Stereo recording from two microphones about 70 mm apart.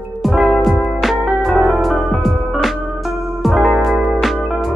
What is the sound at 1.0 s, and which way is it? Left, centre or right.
Music, centre.